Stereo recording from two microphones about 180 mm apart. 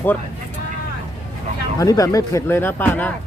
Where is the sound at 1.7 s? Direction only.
20° left (ahead or behind).